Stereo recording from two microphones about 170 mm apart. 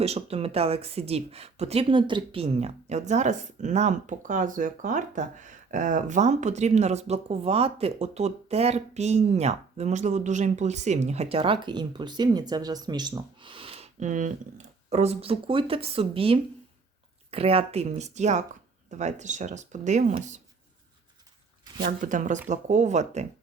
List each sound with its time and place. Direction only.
0.0 s speech: 35° right (ahead or behind)
22.0 s speech: 50° right (ahead or behind)